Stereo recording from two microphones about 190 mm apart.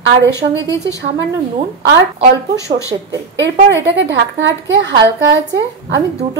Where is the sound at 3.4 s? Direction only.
70° right (ahead or behind).